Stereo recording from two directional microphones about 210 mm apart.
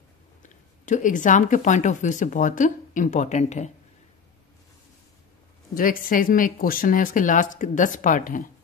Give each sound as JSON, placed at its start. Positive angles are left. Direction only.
{"t": 0.4, "sound": "speech", "side_deg": 35}
{"t": 5.8, "sound": "speech", "side_deg": 40}